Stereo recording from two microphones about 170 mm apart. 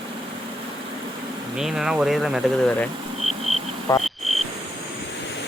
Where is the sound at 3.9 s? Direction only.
15° left (ahead or behind).